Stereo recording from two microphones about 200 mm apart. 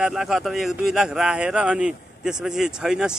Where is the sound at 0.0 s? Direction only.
Centre (ahead or behind).